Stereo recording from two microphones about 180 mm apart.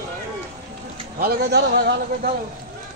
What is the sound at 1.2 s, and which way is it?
A man's voice, 60° right (ahead or behind).